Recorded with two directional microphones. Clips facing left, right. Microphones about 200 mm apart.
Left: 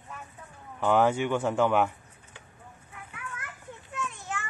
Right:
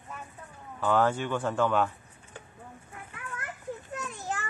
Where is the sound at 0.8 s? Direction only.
15° left (ahead or behind).